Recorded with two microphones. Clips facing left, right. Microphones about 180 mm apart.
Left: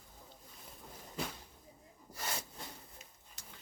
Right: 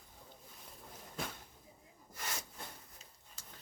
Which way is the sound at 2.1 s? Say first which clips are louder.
Left 3 dB; 35° left (ahead or behind).